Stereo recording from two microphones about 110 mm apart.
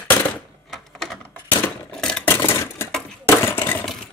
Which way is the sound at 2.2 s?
20° left (ahead or behind).